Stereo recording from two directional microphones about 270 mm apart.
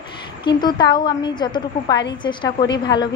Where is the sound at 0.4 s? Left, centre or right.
Centre.